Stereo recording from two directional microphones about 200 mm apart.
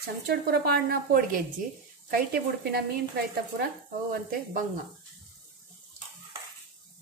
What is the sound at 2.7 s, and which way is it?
Speech, 50° right (ahead or behind).